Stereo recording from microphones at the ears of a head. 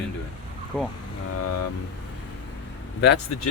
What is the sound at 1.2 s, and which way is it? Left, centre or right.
Speech, left.